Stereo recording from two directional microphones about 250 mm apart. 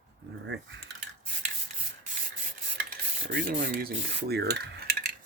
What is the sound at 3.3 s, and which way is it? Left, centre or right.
Speech, right.